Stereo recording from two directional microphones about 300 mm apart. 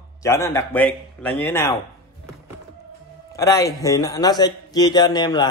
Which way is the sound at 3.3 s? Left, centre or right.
Centre.